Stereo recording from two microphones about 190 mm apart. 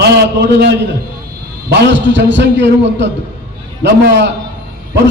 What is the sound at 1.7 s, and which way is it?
A man's voice, 65° right (ahead or behind).